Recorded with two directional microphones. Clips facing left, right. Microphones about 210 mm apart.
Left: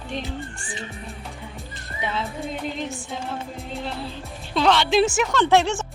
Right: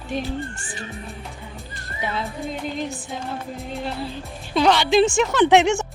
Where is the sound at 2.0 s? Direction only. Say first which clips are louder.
Right 1 dB; centre (ahead or behind).